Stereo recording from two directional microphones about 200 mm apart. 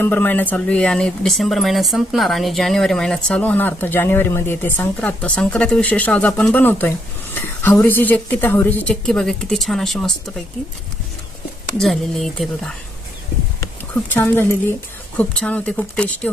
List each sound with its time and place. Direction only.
0.0 s speech: 10° left (ahead or behind)
11.8 s speech: centre (ahead or behind)
14.1 s speech: 10° left (ahead or behind)